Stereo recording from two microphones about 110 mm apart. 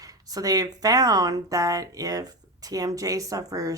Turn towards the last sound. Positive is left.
turn(degrees=-30)  # may be behind; listen again after turning